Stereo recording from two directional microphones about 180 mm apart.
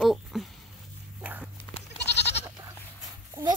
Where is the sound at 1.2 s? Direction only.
10° right (ahead or behind).